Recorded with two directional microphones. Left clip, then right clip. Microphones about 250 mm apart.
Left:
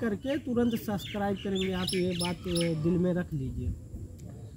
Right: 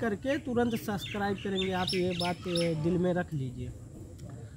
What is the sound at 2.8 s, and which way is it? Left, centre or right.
Speech, centre.